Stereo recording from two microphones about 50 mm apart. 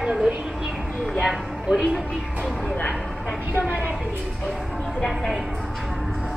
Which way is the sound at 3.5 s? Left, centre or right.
Right.